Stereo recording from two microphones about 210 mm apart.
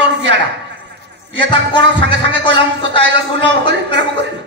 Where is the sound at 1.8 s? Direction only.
60° right (ahead or behind).